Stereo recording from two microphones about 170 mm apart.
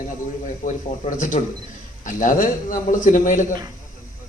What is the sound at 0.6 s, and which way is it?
A man's voice, 45° left (ahead or behind).